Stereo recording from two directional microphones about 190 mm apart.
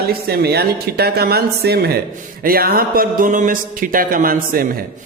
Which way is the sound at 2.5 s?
50° right (ahead or behind).